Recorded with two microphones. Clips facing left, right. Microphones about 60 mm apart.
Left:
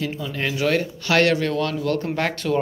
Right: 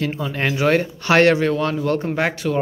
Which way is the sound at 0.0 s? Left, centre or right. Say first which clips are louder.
Right 4 dB; right.